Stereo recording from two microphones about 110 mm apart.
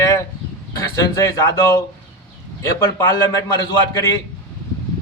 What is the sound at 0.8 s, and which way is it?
A man's voice, 30° left (ahead or behind).